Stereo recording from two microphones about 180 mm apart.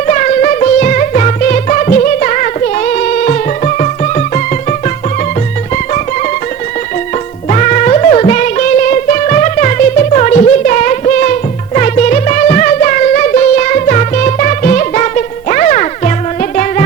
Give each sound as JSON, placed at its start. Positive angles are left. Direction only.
{"t": 0.1, "sound": "music", "side_deg": 45}
{"t": 7.5, "sound": "music", "side_deg": 40}